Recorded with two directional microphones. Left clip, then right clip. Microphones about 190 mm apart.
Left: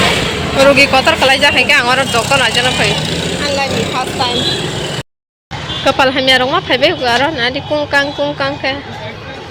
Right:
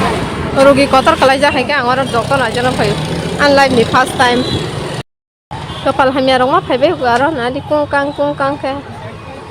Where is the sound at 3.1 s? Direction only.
50° right (ahead or behind).